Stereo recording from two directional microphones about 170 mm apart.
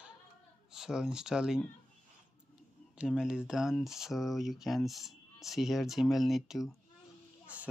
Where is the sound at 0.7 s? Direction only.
5° right (ahead or behind).